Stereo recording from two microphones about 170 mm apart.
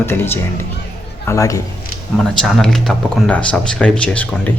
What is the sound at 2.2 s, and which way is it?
Speech, centre (ahead or behind).